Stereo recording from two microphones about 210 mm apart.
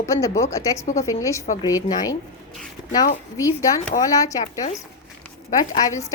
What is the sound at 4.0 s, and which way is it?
Speech, 15° left (ahead or behind).